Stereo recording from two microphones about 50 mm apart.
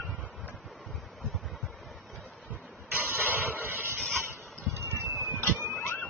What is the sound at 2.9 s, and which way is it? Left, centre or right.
Vehicle, right.